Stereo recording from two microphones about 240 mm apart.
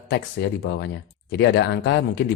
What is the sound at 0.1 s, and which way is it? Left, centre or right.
Speech, left.